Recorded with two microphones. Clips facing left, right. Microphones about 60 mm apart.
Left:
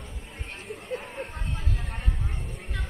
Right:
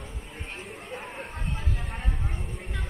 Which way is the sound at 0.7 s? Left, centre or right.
Centre.